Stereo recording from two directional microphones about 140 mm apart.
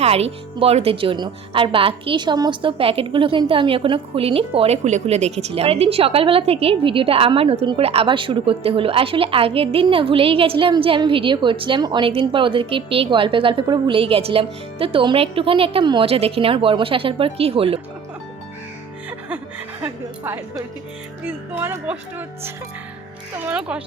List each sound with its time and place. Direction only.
0.0 s a woman's voice: 45° right (ahead or behind)
19.8 s music: 15° right (ahead or behind)
23.5 s music: 10° right (ahead or behind)